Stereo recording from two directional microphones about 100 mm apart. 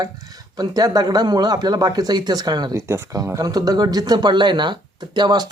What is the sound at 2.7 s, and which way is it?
Speech, 30° right (ahead or behind).